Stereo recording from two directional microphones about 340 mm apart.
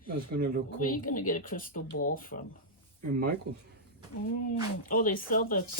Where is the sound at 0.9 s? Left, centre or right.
Left.